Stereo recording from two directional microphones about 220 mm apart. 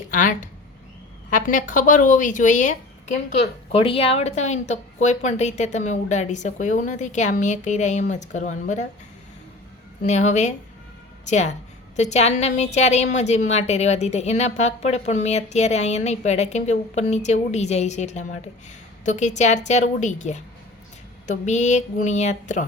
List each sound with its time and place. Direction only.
0.1 s a woman's voice: 35° left (ahead or behind)
10.0 s a woman's voice: 30° left (ahead or behind)